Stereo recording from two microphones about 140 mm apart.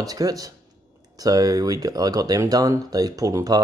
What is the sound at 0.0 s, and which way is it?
Speech, 25° right (ahead or behind).